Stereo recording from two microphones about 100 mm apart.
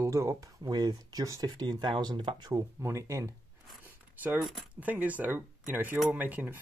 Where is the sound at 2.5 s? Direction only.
30° right (ahead or behind).